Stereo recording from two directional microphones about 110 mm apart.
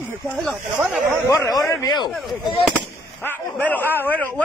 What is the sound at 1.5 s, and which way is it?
Speech, 30° left (ahead or behind).